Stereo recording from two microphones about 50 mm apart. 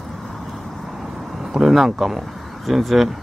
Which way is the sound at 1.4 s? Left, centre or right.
Centre.